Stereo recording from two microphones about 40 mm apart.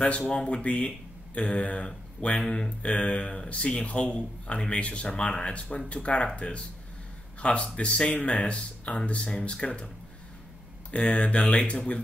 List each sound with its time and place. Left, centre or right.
0.3 s speech: left
2.4 s speech: centre
2.8 s speech: left
10.9 s speech: left